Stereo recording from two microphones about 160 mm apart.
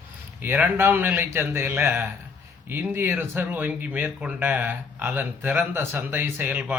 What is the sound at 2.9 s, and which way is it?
Speech, 15° right (ahead or behind).